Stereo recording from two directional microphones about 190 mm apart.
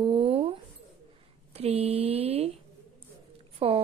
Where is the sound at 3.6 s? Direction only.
30° right (ahead or behind).